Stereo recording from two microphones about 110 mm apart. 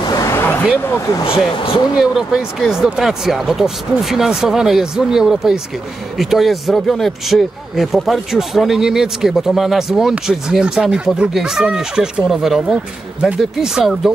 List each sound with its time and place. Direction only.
0.1 s a sound: 25° left (ahead or behind)
0.7 s speech: 20° left (ahead or behind)
1.2 s speech: 55° left (ahead or behind)
2.0 s speech: centre (ahead or behind)